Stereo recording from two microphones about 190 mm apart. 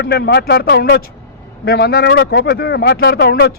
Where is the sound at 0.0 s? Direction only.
60° left (ahead or behind).